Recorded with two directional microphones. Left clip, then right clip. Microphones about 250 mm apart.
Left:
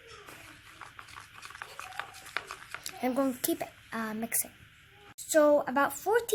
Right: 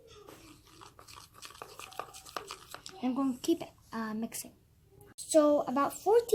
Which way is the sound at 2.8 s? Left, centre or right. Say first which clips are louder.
Left 4 dB; left.